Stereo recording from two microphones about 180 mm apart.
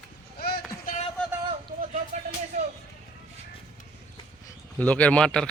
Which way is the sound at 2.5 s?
45° right (ahead or behind).